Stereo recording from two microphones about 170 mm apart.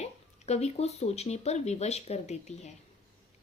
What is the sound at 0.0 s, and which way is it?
Speech, 40° left (ahead or behind).